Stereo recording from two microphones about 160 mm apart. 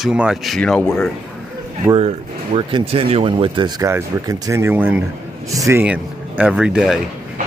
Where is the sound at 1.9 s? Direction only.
35° right (ahead or behind); by 5.8 s 20° right (ahead or behind).